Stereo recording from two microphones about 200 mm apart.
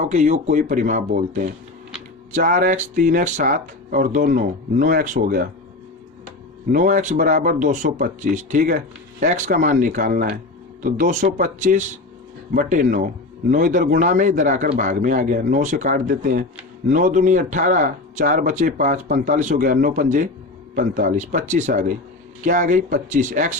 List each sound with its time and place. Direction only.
0.0 s speech: 35° right (ahead or behind)
6.7 s speech: 40° right (ahead or behind)